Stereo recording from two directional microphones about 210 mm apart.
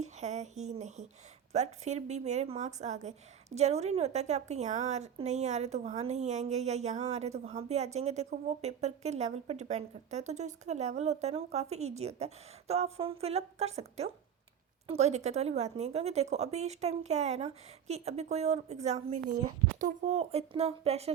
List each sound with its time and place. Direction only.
0.0 s a woman's voice: 35° right (ahead or behind)